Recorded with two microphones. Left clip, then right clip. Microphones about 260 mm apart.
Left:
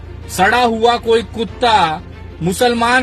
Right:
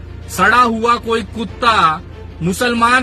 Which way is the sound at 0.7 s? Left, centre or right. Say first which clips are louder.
Left 2 dB; left.